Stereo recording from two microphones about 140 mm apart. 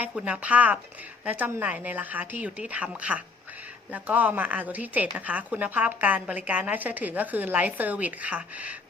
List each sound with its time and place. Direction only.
0.0 s a woman's voice: 10° right (ahead or behind)